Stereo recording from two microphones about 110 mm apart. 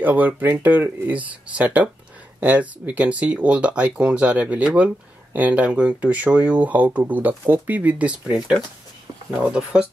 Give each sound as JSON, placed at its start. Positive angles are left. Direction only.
{"t": 0.0, "sound": "speech", "side_deg": -15}